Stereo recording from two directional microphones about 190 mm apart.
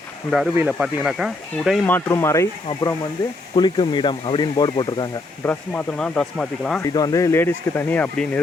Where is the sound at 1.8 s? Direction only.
15° left (ahead or behind).